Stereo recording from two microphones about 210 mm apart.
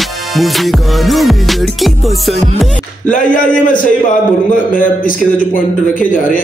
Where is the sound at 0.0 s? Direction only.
Centre (ahead or behind).